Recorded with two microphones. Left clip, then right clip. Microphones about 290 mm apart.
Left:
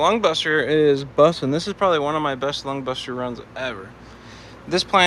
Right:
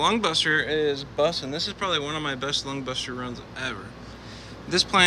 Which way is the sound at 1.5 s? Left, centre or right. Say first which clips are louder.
Left 7 dB; centre.